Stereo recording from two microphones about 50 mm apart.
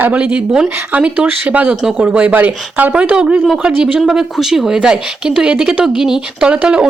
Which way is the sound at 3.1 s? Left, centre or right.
Centre.